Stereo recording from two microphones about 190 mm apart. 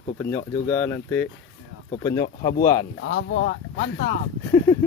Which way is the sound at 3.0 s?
65° left (ahead or behind).